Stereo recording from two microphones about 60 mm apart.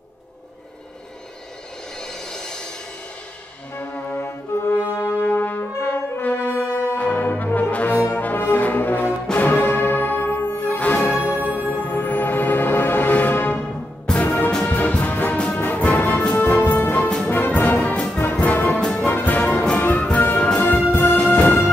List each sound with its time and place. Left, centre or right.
2.0 s a sound: centre
3.8 s brass instrument: left
4.2 s brass instrument: left
5.2 s brass instrument: left
5.8 s brass instrument: left
11.1 s music: right
11.7 s music: left
15.3 s music: centre
15.6 s music: left
17.9 s music: centre
18.8 s music: centre
19.0 s music: left
21.3 s music: left